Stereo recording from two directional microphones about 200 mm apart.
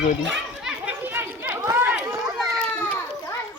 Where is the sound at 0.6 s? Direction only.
10° right (ahead or behind).